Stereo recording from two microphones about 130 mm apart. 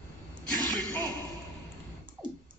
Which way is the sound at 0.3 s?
35° right (ahead or behind).